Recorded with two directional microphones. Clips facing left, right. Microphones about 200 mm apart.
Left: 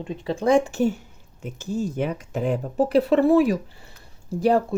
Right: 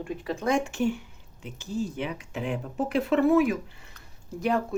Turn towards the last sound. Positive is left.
turn(degrees=35)  # may be behind; listen again after turning